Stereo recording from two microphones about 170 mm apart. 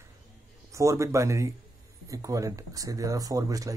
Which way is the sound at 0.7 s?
20° right (ahead or behind).